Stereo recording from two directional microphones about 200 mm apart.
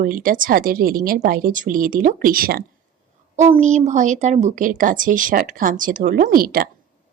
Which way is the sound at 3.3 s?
35° right (ahead or behind).